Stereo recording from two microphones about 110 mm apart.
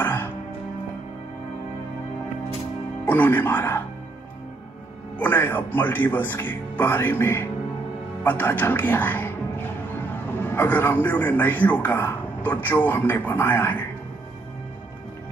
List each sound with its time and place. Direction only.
0.0 s music: 20° left (ahead or behind)
3.1 s speech: 15° left (ahead or behind)
5.2 s a man's voice: 20° left (ahead or behind)